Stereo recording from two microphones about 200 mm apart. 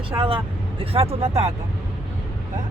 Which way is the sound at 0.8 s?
30° right (ahead or behind).